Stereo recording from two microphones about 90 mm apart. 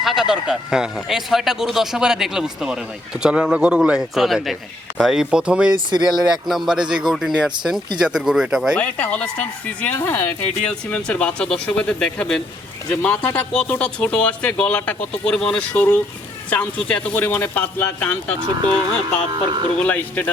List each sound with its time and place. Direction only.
0.0 s a man's voice: centre (ahead or behind)
8.8 s speech: 15° left (ahead or behind)